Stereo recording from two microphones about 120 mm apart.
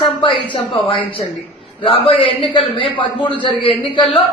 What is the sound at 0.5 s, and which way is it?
A man's voice, 45° left (ahead or behind).